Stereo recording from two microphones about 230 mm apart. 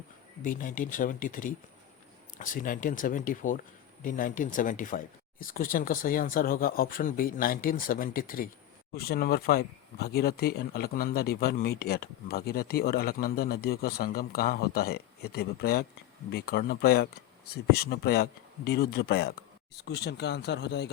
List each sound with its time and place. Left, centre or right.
0.4 s speech: left